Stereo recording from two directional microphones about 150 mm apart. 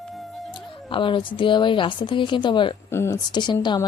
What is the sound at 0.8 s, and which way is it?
A woman's voice, 35° left (ahead or behind).